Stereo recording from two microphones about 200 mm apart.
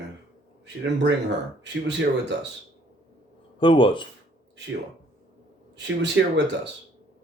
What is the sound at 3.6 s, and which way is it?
Speech, 25° left (ahead or behind).